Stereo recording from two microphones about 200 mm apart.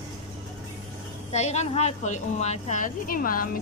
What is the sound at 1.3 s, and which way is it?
A woman's voice, 35° left (ahead or behind).